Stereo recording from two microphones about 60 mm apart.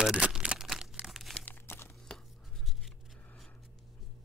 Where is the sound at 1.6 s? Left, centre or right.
Left.